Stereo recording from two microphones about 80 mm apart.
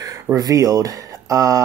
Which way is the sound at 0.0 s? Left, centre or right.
Right.